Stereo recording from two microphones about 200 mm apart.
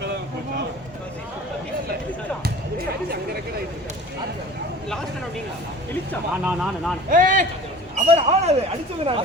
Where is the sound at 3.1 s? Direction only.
50° right (ahead or behind).